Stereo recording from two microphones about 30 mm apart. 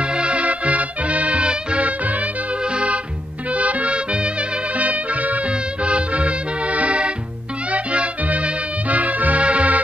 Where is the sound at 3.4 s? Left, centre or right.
Right.